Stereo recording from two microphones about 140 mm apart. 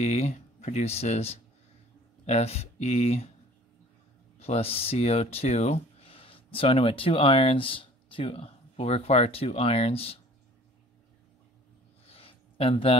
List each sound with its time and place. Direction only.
0.0 s speech: 50° left (ahead or behind)
4.4 s speech: 45° left (ahead or behind)
12.1 s a sound: 40° left (ahead or behind)